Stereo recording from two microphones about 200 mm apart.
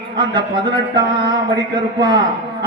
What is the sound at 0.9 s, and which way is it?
Speech, 20° right (ahead or behind).